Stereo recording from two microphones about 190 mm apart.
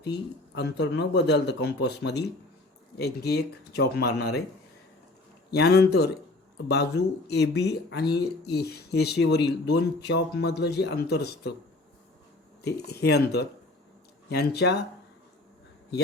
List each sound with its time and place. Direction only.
0.0 s speech: 65° left (ahead or behind)
5.5 s speech: 60° left (ahead or behind)
12.6 s speech: 60° left (ahead or behind)